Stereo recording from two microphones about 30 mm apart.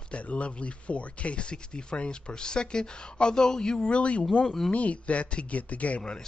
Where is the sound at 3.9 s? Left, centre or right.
Left.